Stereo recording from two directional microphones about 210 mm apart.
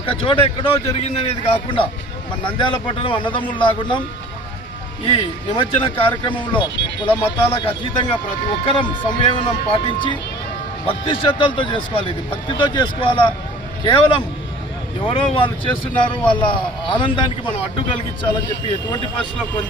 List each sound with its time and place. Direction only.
0.2 s speech: 25° left (ahead or behind)
5.0 s speech: 25° left (ahead or behind)